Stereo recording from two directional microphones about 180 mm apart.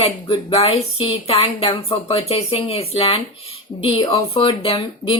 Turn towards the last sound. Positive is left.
turn(degrees=30)  # may be behind; listen again after turning